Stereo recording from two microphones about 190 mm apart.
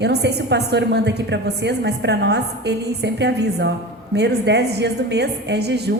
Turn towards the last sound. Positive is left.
turn(degrees=-60)  # may be behind; listen again after turning